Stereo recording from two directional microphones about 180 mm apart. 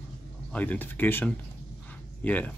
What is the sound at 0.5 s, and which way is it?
Speech, 10° left (ahead or behind).